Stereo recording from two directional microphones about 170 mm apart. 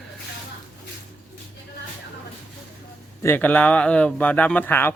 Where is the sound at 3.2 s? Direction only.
10° left (ahead or behind).